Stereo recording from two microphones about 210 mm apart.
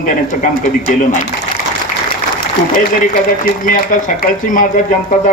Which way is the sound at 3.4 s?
40° left (ahead or behind).